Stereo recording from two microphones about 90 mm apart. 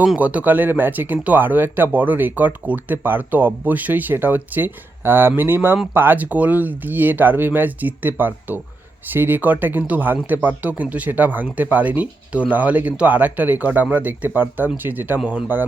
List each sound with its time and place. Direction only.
0.2 s speech: 15° right (ahead or behind)